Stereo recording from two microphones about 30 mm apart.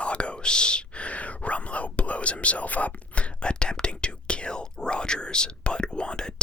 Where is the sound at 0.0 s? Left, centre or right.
Left.